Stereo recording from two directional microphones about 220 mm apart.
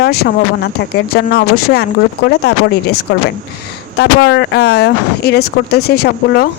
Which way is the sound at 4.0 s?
50° left (ahead or behind).